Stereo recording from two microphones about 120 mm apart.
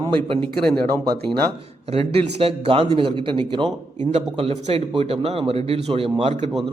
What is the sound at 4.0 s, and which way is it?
A man's voice, 60° right (ahead or behind).